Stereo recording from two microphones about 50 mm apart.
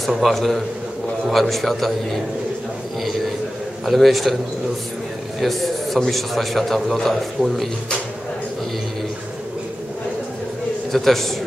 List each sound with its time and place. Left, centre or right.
0.0 s a man's voice: centre
3.8 s a man's voice: centre
5.4 s a man's voice: centre
10.9 s a man's voice: centre